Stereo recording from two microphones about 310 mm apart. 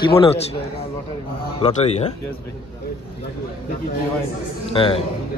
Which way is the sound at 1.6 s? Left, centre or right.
Left.